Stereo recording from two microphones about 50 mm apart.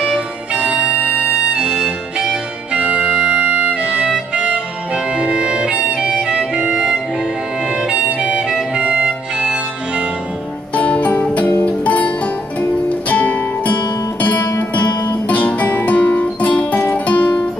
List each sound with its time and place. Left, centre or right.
0.5 s music: right
10.7 s music: left
13.1 s music: left